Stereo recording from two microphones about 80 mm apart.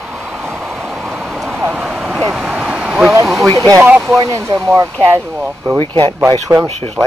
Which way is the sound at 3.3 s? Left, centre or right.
Centre.